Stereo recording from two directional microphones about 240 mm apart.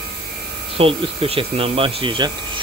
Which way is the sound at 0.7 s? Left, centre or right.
Right.